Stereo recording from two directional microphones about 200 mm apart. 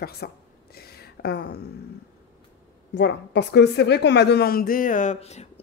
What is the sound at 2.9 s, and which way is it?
A woman's voice, 60° left (ahead or behind).